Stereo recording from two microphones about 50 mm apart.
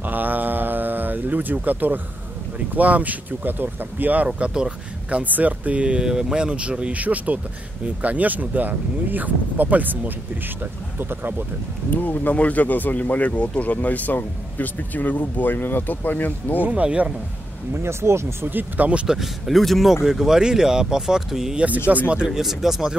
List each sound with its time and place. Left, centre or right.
0.0 s a sound: right
2.7 s speech: right
4.4 s speech: right
5.2 s speech: right
11.9 s speech: left
16.6 s speech: right
17.8 s speech: right
18.4 s speech: right
19.0 s speech: centre
19.9 s speech: centre
21.5 s speech: right
22.3 s speech: centre